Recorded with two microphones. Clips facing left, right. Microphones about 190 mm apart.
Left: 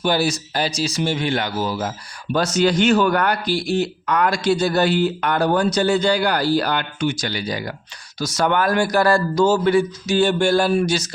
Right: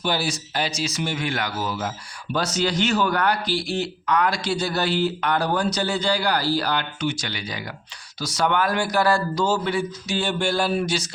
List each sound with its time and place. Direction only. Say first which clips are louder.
0.0 s speech: left 5 dB; 45° left (ahead or behind); by 1.9 s 30° left (ahead or behind)
2.3 s speech: left 6 dB; 50° left (ahead or behind)